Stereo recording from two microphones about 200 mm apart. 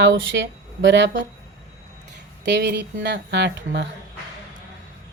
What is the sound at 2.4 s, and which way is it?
A woman's voice, 60° right (ahead or behind).